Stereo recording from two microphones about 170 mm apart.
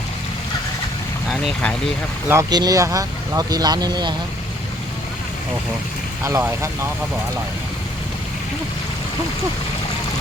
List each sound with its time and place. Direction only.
1.3 s speech: centre (ahead or behind)
2.2 s speech: 15° right (ahead or behind)
6.2 s speech: 15° right (ahead or behind)